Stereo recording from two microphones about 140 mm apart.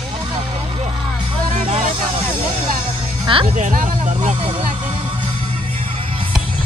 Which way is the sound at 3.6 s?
75° right (ahead or behind).